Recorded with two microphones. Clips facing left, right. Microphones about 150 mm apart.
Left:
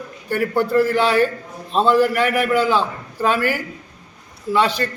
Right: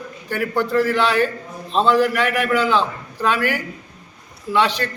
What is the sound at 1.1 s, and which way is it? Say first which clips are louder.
A man's voice: left 2 dB; 45° left (ahead or behind).